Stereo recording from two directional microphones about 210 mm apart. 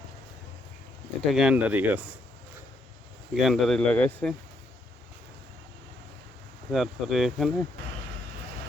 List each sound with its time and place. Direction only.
1.3 s speech: 5° right (ahead or behind)
3.3 s speech: centre (ahead or behind)
6.7 s speech: centre (ahead or behind)